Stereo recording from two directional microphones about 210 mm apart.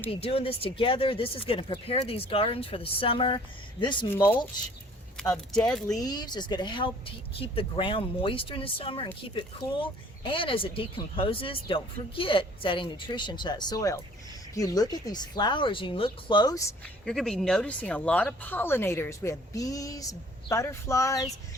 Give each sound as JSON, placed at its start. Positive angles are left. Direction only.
{"t": 0.1, "sound": "speech", "side_deg": 25}
{"t": 4.1, "sound": "speech", "side_deg": 10}
{"t": 5.9, "sound": "speech", "side_deg": 20}
{"t": 17.1, "sound": "speech", "side_deg": 0}